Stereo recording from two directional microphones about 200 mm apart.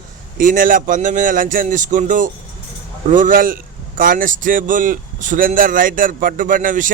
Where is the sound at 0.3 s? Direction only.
45° right (ahead or behind).